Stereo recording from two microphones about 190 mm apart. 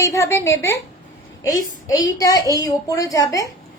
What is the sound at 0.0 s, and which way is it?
A woman's voice, 15° left (ahead or behind).